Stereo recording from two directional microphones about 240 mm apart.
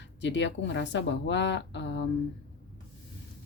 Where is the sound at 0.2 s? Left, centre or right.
Left.